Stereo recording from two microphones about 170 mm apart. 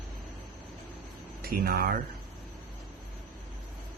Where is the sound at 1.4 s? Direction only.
60° right (ahead or behind).